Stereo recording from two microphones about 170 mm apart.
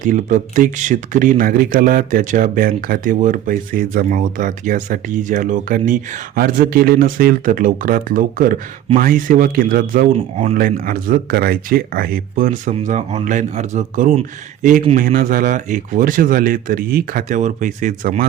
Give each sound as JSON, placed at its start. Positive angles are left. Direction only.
{"t": 0.0, "sound": "speech", "side_deg": -50}